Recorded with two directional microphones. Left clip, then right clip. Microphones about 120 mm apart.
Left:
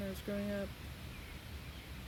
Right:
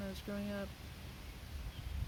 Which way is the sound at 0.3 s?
10° right (ahead or behind).